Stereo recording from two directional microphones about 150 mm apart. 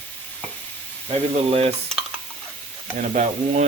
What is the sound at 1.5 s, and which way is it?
Stir, 45° right (ahead or behind).